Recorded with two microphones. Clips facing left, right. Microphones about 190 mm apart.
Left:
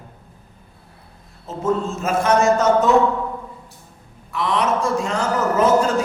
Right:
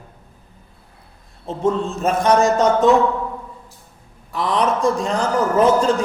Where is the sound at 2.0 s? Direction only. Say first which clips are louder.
Right 1 dB; 35° right (ahead or behind).